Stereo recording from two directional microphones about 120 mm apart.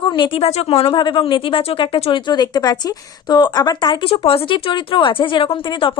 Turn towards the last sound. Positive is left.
turn(degrees=45)  # may be behind; listen again after turning